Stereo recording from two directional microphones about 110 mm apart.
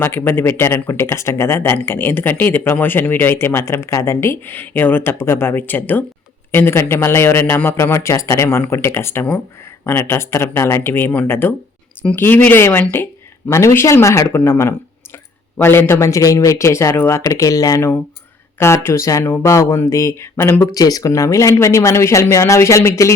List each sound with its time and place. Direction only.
0.0 s speech: 20° left (ahead or behind)